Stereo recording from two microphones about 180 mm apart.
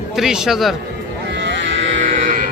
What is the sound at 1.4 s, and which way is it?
Cattle, 90° right.